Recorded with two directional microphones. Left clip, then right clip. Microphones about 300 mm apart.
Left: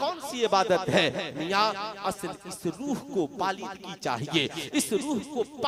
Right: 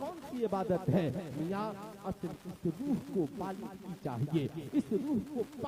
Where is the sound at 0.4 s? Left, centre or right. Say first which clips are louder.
Left 10 dB; centre.